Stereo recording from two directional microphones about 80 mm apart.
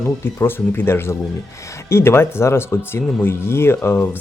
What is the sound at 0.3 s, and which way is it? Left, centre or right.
Speech, left.